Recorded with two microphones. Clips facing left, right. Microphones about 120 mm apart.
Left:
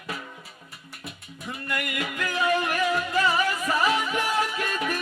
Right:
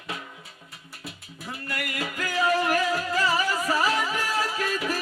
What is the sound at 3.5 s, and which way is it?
Music, 35° right (ahead or behind).